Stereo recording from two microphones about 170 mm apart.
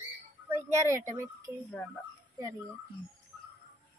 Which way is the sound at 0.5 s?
15° right (ahead or behind).